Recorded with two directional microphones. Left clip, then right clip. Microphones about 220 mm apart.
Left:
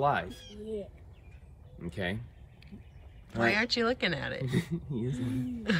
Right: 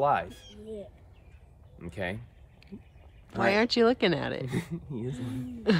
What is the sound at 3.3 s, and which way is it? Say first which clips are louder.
Speech: right 3 dB; 20° right (ahead or behind).